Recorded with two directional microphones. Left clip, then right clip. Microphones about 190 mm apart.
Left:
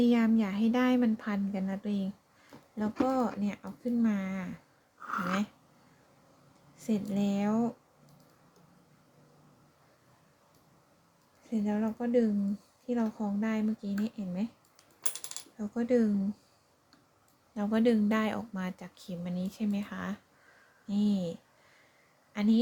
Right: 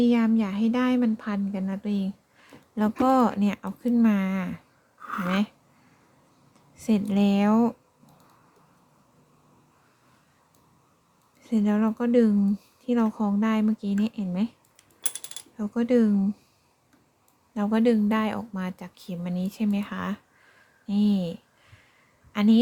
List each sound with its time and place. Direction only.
0.0 s speech: 20° right (ahead or behind)
3.1 s speech: 40° right (ahead or behind)
5.0 s speech: 20° right (ahead or behind)
6.7 s speech: 30° right (ahead or behind)
11.4 s speech: 40° right (ahead or behind)
15.5 s speech: 30° right (ahead or behind)
17.5 s a woman's voice: 25° right (ahead or behind)